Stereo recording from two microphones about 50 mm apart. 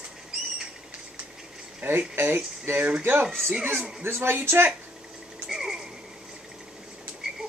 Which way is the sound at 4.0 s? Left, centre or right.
Right.